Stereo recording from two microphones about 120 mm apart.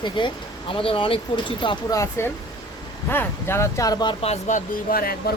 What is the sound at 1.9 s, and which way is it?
Speech, 25° left (ahead or behind).